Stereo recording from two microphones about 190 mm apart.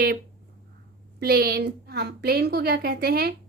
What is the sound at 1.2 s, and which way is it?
A woman's voice, 55° right (ahead or behind).